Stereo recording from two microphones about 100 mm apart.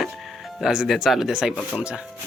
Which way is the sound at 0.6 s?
5° right (ahead or behind).